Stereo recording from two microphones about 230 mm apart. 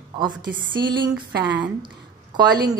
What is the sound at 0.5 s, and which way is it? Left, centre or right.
Music, centre.